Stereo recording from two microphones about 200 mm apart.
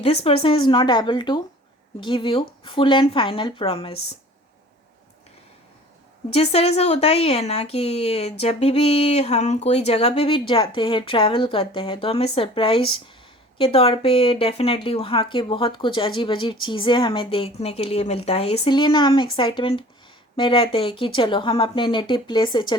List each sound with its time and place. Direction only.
0.0 s speech: 30° left (ahead or behind)
6.3 s speech: 30° left (ahead or behind)